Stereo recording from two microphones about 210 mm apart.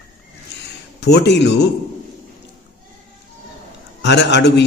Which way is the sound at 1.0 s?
55° left (ahead or behind).